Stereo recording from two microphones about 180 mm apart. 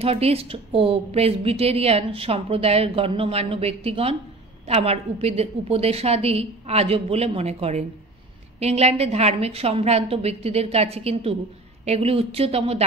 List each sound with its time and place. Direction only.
0.0 s a woman's voice: 35° right (ahead or behind)